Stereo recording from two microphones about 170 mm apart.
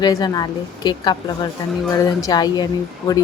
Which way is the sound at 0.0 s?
20° left (ahead or behind).